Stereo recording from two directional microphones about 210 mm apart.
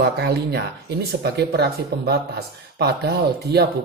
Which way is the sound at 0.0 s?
50° right (ahead or behind).